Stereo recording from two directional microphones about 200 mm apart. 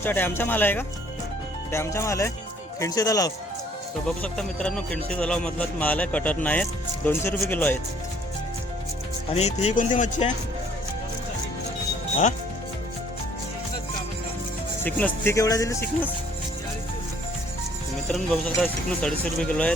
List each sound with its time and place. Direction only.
0.0 s speech: 10° left (ahead or behind)
4.0 s speech: 5° left (ahead or behind)
9.3 s speech: 35° left (ahead or behind)
14.8 s speech: 10° left (ahead or behind)
18.1 s speech: centre (ahead or behind)